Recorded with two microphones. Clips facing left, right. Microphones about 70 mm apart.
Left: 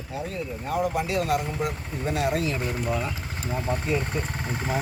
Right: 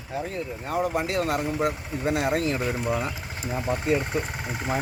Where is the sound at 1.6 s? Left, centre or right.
Right.